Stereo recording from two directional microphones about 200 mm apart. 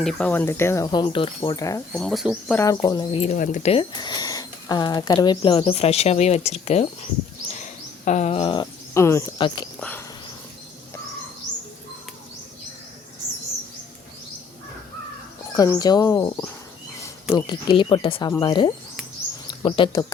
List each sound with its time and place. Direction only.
0.0 s speech: 5° left (ahead or behind)
1.9 s speech: centre (ahead or behind)
2.6 s speech: 15° left (ahead or behind)
15.5 s speech: 15° left (ahead or behind)